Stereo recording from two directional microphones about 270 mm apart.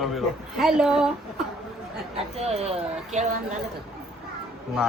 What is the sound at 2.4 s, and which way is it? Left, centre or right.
Speech, right.